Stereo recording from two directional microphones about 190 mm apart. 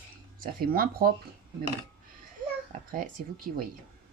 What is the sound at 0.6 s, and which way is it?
Speech, 50° right (ahead or behind).